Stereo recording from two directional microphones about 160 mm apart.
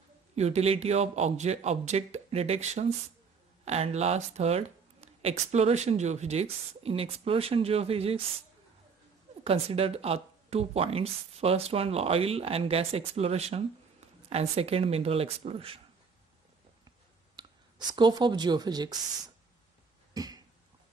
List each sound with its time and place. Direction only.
0.4 s a man's voice: 40° right (ahead or behind)
9.4 s speech: 35° right (ahead or behind)
17.4 s speech: 25° right (ahead or behind)